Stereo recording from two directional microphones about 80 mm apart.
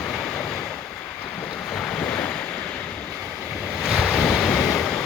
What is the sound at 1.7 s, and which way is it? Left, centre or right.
Waves, centre.